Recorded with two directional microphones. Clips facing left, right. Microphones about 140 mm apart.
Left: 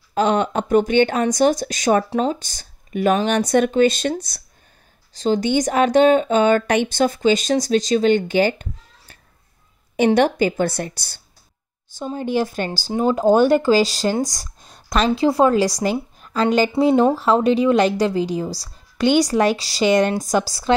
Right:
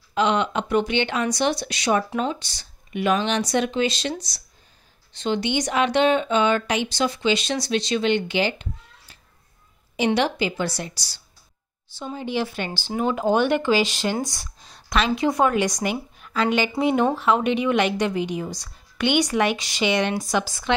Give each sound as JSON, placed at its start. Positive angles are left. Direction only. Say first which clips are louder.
{"t": 0.1, "sound": "speech", "louder": "left 3 dB", "side_deg": 45}
{"t": 5.1, "sound": "speech", "louder": "left 5 dB", "side_deg": 40}